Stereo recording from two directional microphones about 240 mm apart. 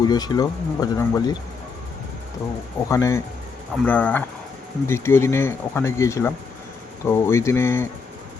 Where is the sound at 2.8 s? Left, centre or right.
Centre.